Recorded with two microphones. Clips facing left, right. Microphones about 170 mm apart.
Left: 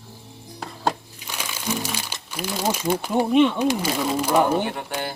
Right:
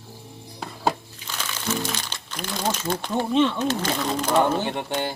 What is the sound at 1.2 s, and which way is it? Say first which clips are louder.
Speech: left 1 dB; 15° left (ahead or behind).